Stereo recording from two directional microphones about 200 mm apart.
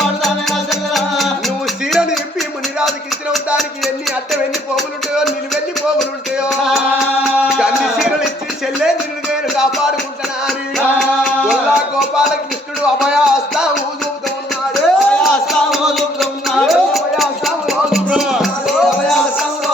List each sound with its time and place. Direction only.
0.2 s music: centre (ahead or behind)
3.3 s music: centre (ahead or behind)
4.8 s speech: centre (ahead or behind)
6.0 s music: 5° right (ahead or behind)
7.4 s a sound: centre (ahead or behind)
9.6 s music: 5° right (ahead or behind)
12.8 s a sound: 5° right (ahead or behind)
14.7 s music: centre (ahead or behind)